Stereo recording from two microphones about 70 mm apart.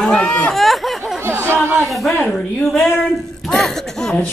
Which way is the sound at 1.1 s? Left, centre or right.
Right.